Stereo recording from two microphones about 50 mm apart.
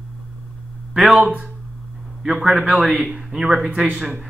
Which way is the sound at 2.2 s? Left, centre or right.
Centre.